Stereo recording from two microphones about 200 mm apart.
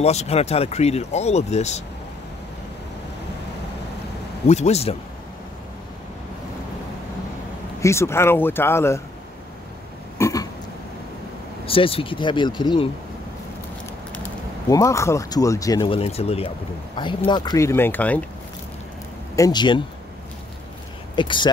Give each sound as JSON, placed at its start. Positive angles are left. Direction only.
{"t": 0.0, "sound": "speech", "side_deg": 30}
{"t": 4.5, "sound": "speech", "side_deg": 35}
{"t": 7.8, "sound": "speech", "side_deg": 15}
{"t": 10.1, "sound": "burping", "side_deg": 15}
{"t": 11.6, "sound": "speech", "side_deg": 25}
{"t": 14.7, "sound": "speech", "side_deg": 15}
{"t": 19.3, "sound": "speech", "side_deg": 20}
{"t": 21.2, "sound": "speech", "side_deg": 25}